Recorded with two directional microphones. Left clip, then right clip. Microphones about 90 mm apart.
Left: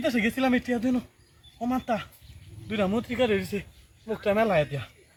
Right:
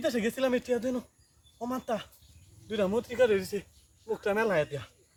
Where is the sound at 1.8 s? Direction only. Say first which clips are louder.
Left 2 dB; 20° right (ahead or behind).